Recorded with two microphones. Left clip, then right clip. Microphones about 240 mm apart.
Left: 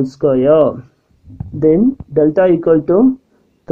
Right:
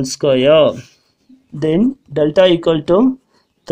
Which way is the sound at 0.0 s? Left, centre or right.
Right.